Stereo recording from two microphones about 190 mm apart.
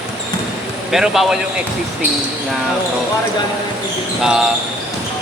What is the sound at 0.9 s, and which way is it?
Speech, centre (ahead or behind).